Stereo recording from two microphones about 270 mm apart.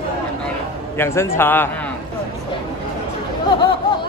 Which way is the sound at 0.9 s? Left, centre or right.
Centre.